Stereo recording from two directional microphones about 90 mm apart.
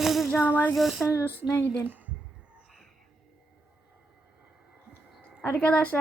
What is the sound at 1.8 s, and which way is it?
Speech, 20° right (ahead or behind).